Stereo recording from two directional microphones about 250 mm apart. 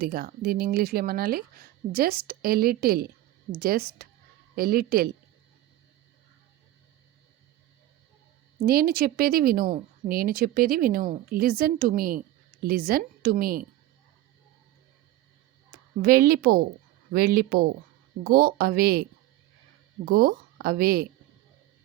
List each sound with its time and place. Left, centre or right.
0.0 s speech: right
8.6 s speech: right
16.0 s speech: right
20.1 s speech: right